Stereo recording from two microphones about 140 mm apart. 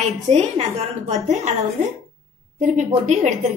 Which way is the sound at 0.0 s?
55° right (ahead or behind).